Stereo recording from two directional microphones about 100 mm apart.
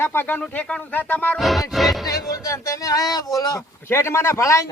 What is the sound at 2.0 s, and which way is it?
A man's voice, 35° left (ahead or behind).